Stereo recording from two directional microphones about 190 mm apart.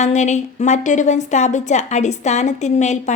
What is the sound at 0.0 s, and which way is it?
A woman's voice, 35° left (ahead or behind).